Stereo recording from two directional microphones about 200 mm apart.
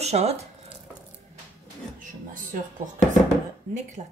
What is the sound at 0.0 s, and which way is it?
Speech, 30° right (ahead or behind).